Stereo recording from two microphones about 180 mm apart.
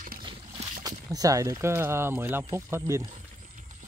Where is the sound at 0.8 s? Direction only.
20° right (ahead or behind).